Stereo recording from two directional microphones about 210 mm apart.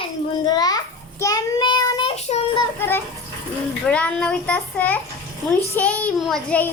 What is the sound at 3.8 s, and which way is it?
A child's voice, 5° left (ahead or behind).